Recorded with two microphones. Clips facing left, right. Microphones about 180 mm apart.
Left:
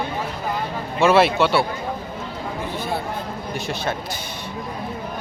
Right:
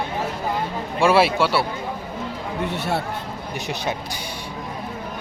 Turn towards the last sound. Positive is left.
turn(degrees=-15)  # may be behind; listen again after turning